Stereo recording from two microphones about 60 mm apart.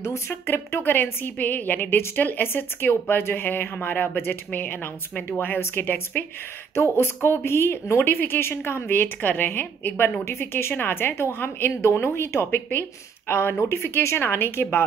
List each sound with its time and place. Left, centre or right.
0.0 s a woman's voice: left
11.8 s speech: left
12.4 s a woman's voice: left
13.3 s a woman's voice: left